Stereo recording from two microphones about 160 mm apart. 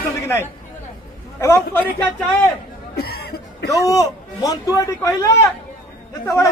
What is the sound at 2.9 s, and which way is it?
Chuckle, 75° left (ahead or behind).